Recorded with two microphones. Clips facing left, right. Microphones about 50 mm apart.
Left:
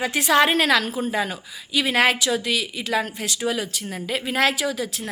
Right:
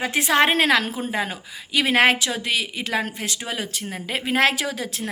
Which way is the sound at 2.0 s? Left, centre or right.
Right.